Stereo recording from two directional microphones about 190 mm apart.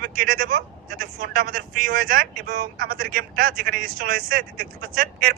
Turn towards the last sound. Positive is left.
turn(degrees=-50)  # may be behind; listen again after turning